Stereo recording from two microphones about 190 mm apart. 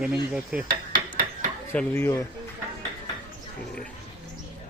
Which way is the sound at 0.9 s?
50° right (ahead or behind).